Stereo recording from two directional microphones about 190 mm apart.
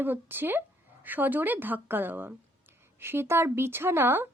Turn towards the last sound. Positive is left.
turn(degrees=-10)  # may be behind; listen again after turning